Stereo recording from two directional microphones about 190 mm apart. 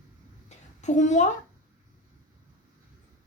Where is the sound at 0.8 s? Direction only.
40° left (ahead or behind).